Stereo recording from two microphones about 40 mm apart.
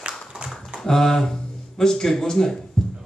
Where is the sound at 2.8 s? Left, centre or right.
Centre.